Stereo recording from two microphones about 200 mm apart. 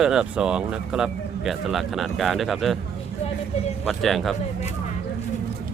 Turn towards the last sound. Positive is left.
turn(degrees=0)  # may be behind; listen again after turning